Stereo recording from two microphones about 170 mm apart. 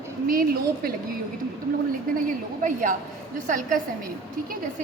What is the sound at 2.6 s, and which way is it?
A woman's voice, 50° right (ahead or behind).